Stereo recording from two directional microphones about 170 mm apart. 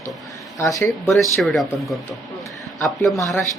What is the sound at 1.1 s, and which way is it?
Speech, centre (ahead or behind).